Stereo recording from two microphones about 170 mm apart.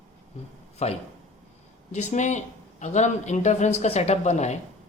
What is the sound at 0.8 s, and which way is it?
Speech, 40° left (ahead or behind).